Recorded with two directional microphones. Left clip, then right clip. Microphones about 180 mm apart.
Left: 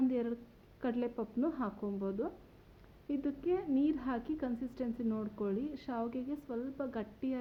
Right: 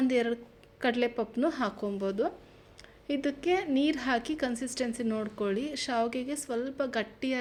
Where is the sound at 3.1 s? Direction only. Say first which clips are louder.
Right 6 dB; 10° right (ahead or behind).